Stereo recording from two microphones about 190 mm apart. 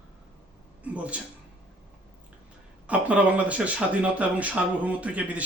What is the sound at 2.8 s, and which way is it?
Speech, 5° right (ahead or behind).